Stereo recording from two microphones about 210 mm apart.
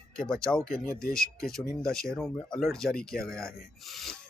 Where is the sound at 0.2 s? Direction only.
5° left (ahead or behind).